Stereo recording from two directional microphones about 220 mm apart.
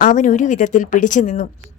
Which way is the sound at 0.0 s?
35° left (ahead or behind).